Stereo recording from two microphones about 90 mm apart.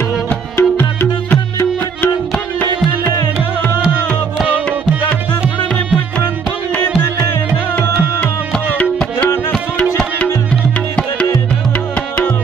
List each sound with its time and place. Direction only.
0.3 s music: 25° left (ahead or behind)
9.9 s music: 10° left (ahead or behind)